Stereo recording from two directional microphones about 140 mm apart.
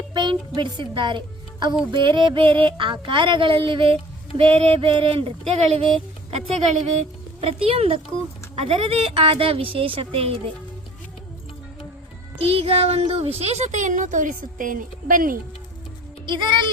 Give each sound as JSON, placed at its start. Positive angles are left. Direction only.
{"t": 0.1, "sound": "speech", "side_deg": -30}
{"t": 7.4, "sound": "speech", "side_deg": -45}
{"t": 12.4, "sound": "a child's voice", "side_deg": -45}
{"t": 16.2, "sound": "speech", "side_deg": -35}